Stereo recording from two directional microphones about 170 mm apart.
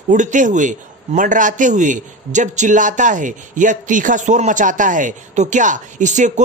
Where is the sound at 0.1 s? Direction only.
50° right (ahead or behind).